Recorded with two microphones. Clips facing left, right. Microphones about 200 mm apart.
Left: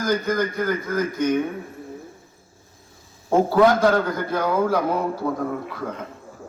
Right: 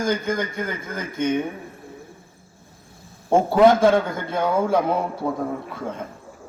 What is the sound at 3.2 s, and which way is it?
A man's voice, 25° right (ahead or behind).